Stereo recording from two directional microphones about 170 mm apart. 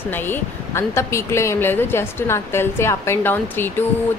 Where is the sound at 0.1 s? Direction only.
10° left (ahead or behind).